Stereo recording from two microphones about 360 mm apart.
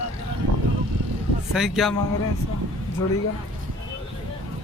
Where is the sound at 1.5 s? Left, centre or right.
Centre.